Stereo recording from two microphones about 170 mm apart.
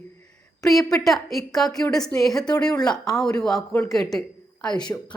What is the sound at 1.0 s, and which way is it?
Speech, centre (ahead or behind).